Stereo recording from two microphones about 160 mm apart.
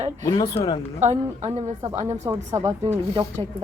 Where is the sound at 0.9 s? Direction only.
45° right (ahead or behind).